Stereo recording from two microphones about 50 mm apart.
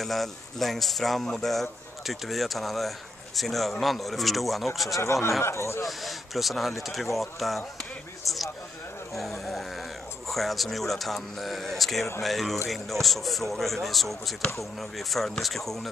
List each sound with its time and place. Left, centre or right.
0.0 s speech: centre
5.0 s speech: left
5.9 s speech: centre
8.3 s a sound: centre
9.1 s speech: centre